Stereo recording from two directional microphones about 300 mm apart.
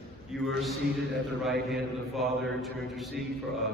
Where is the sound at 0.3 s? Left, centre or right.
Centre.